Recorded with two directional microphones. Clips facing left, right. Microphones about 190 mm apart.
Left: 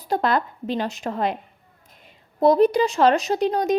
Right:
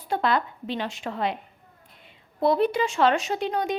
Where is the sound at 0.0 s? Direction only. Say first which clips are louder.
Left 3 dB; 40° left (ahead or behind).